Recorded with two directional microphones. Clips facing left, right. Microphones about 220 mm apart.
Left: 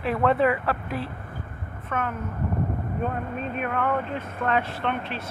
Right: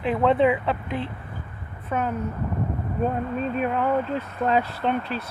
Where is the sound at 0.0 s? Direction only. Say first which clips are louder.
Right 2 dB; 20° right (ahead or behind).